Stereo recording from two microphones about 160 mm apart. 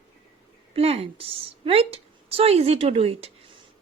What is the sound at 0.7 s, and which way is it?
A woman's voice, 40° right (ahead or behind).